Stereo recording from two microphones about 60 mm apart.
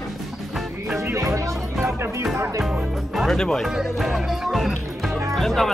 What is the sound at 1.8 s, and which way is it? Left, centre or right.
Music, right.